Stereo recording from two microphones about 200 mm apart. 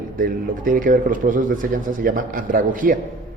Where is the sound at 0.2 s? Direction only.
45° right (ahead or behind).